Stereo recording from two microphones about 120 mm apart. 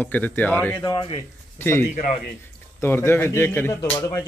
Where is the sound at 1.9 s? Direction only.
70° left (ahead or behind).